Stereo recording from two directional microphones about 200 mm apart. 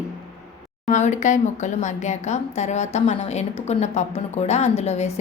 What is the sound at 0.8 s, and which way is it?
A woman's voice, 40° left (ahead or behind).